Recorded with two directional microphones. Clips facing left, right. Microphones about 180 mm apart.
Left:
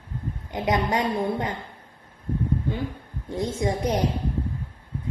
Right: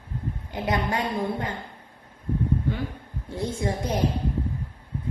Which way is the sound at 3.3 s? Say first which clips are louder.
Left 2 dB; 20° left (ahead or behind).